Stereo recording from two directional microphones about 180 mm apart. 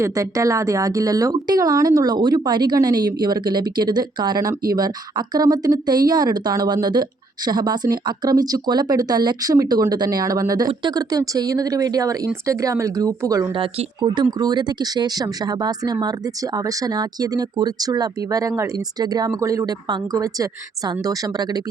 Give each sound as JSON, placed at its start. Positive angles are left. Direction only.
{"t": 0.0, "sound": "speech", "side_deg": -20}